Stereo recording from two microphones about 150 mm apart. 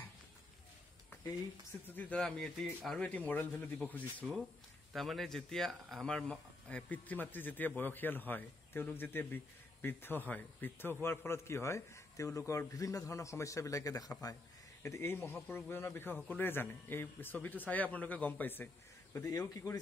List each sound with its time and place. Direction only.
1.9 s a man's voice: 10° left (ahead or behind)